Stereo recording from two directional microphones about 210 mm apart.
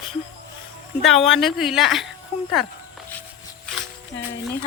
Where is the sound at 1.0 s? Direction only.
Centre (ahead or behind).